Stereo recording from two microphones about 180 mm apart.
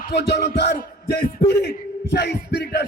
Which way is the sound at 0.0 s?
60° left (ahead or behind).